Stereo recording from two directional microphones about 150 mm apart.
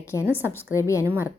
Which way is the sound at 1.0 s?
15° right (ahead or behind).